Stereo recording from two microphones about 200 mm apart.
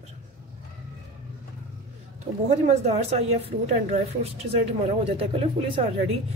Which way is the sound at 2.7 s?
30° right (ahead or behind).